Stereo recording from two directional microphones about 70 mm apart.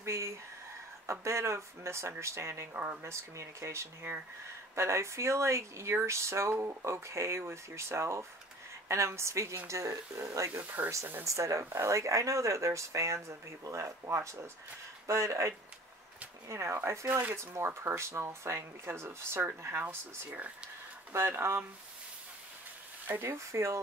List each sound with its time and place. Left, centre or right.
0.0 s speech: right
3.0 s speech: right
17.1 s speech: right
20.2 s speech: right
21.1 s speech: right
23.0 s speech: right
23.3 s speech: right